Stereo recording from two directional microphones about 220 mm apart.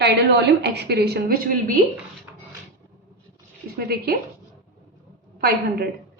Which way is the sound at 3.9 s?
45° right (ahead or behind).